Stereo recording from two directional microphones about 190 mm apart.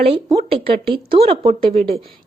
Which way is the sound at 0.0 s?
30° right (ahead or behind).